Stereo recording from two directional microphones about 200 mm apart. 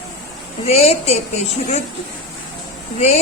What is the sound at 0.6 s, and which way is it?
Speech, 30° left (ahead or behind).